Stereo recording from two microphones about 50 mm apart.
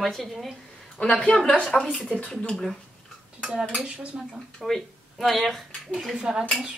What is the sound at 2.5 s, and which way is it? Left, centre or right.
Speech, centre.